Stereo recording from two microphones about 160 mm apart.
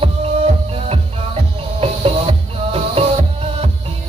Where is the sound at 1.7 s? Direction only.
35° right (ahead or behind).